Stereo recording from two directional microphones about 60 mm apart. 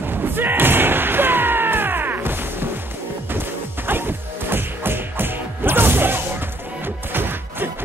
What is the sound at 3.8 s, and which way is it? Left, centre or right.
Music, right.